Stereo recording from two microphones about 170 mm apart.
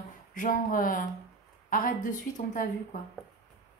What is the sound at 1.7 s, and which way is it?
Speech, 50° left (ahead or behind).